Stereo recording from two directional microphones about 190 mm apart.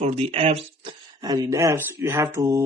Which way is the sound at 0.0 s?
35° right (ahead or behind).